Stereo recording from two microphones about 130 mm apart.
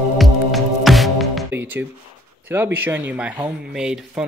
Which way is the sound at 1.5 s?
15° right (ahead or behind).